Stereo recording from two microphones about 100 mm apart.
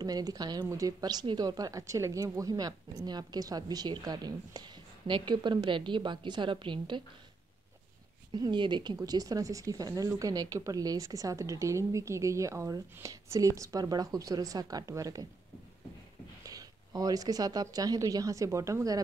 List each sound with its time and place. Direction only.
0.0 s a woman's voice: 40° right (ahead or behind)
8.3 s speech: 50° right (ahead or behind)
16.4 s speech: 35° right (ahead or behind)